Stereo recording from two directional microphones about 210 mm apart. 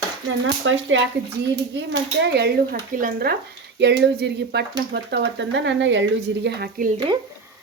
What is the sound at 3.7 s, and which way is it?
Speech, 55° right (ahead or behind).